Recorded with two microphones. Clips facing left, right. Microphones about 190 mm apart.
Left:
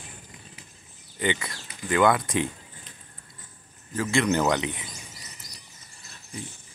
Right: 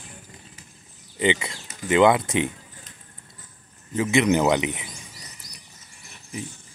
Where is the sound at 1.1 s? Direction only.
20° right (ahead or behind).